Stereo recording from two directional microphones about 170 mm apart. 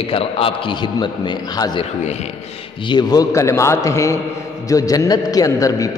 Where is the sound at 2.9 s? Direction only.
25° left (ahead or behind).